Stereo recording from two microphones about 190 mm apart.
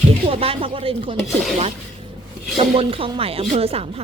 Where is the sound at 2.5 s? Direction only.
30° right (ahead or behind).